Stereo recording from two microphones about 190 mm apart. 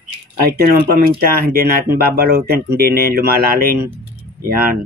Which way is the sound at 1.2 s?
55° right (ahead or behind).